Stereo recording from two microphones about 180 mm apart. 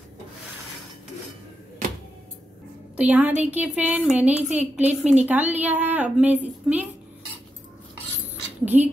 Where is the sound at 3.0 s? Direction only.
10° right (ahead or behind).